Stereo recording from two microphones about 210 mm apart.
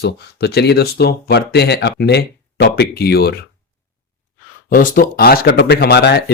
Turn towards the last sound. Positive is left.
turn(degrees=50)  # may be behind; listen again after turning